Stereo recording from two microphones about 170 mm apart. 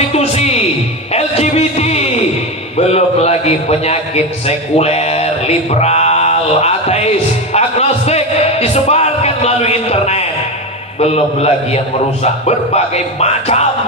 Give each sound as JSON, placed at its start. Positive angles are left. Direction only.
{"t": 0.1, "sound": "music", "side_deg": 35}
{"t": 1.1, "sound": "a sound", "side_deg": 40}
{"t": 2.8, "sound": "a man's voice", "side_deg": 40}